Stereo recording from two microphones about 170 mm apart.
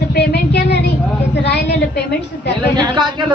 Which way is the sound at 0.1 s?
70° left (ahead or behind).